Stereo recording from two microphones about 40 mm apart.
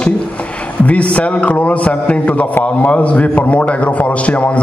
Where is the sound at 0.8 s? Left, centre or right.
Left.